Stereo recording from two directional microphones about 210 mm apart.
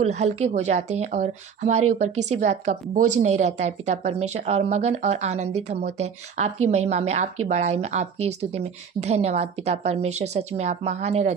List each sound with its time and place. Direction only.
0.0 s speech: 35° right (ahead or behind)